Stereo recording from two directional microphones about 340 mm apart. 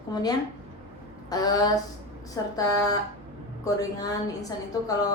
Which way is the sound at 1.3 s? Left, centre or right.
Centre.